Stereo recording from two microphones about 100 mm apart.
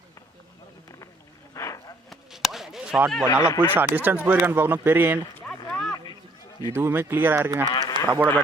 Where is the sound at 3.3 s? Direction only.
35° left (ahead or behind).